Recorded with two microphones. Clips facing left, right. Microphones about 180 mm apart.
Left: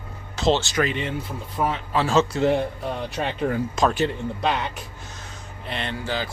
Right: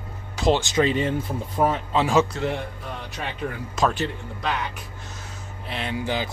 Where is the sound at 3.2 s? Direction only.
45° left (ahead or behind).